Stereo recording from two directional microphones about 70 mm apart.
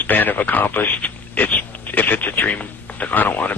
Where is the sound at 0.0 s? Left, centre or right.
Left.